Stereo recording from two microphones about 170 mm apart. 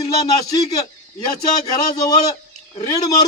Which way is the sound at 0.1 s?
25° left (ahead or behind).